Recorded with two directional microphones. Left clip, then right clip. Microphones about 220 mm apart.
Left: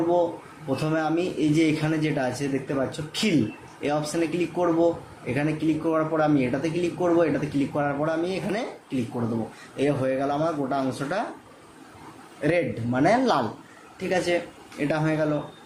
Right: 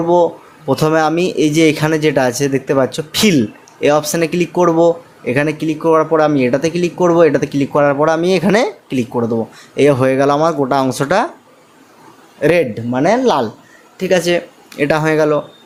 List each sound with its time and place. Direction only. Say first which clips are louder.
0.7 s speech: right 12 dB; 50° right (ahead or behind)
12.4 s speech: right 11 dB; 45° right (ahead or behind)